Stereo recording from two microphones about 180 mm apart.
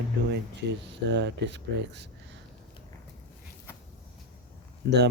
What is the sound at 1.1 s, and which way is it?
Speech, 75° right (ahead or behind).